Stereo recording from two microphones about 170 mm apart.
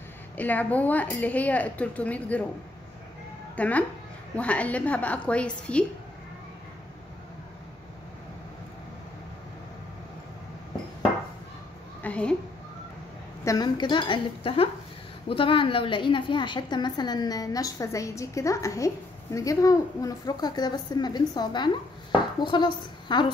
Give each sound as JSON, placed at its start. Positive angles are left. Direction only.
{"t": 0.4, "sound": "a woman's voice", "side_deg": 10}
{"t": 3.5, "sound": "a woman's voice", "side_deg": 10}
{"t": 12.0, "sound": "a child's voice", "side_deg": 5}
{"t": 13.4, "sound": "a woman's voice", "side_deg": 20}